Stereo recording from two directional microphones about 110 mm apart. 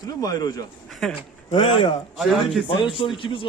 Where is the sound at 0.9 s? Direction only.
5° left (ahead or behind).